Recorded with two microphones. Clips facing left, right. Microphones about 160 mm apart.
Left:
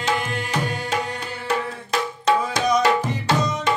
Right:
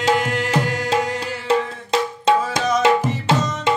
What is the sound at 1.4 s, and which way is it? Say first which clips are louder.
Tabla: right 5 dB; 25° right (ahead or behind).